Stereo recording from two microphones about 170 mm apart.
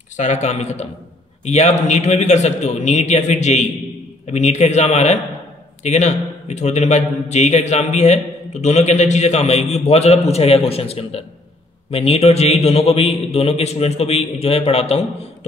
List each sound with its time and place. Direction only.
0.2 s a man's voice: 45° left (ahead or behind)